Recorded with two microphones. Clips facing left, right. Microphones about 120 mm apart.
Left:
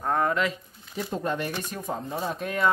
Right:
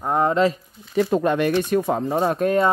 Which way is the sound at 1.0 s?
80° right.